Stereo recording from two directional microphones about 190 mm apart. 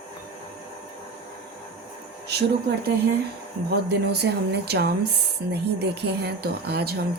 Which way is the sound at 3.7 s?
60° right (ahead or behind).